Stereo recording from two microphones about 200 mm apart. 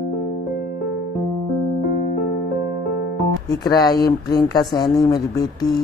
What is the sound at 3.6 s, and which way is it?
Speech, 20° left (ahead or behind).